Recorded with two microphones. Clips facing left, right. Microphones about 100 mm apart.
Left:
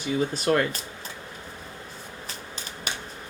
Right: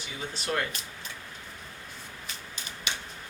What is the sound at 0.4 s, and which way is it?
Speech, 45° left (ahead or behind).